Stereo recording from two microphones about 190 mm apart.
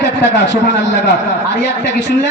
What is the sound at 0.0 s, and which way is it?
A man's voice, 70° left (ahead or behind).